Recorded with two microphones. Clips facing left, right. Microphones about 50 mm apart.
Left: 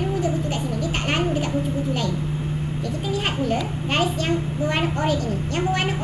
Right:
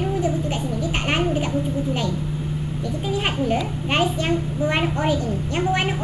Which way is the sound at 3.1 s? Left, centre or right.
Centre.